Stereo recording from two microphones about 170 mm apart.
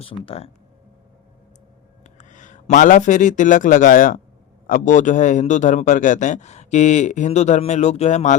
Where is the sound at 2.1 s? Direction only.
50° left (ahead or behind).